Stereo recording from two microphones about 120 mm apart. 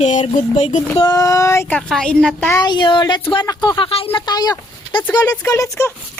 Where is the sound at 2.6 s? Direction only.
40° left (ahead or behind).